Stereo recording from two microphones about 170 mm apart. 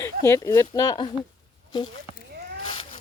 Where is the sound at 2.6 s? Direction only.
30° left (ahead or behind).